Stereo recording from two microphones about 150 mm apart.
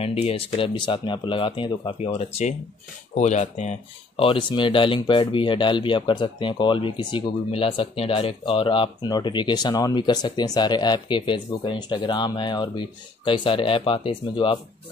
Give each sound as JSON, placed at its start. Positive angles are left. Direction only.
{"t": 0.0, "sound": "speech", "side_deg": 40}
{"t": 4.2, "sound": "speech", "side_deg": 35}